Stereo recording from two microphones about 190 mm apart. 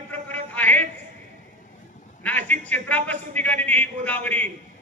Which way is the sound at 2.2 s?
10° left (ahead or behind).